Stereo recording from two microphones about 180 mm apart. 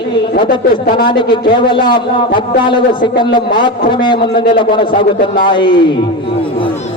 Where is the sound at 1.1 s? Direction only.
25° left (ahead or behind).